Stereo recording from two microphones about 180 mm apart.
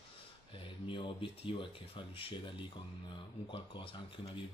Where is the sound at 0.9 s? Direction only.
30° left (ahead or behind).